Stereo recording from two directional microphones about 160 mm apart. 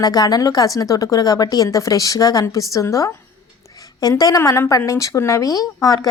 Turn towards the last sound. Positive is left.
turn(degrees=25)  # may be behind; listen again after turning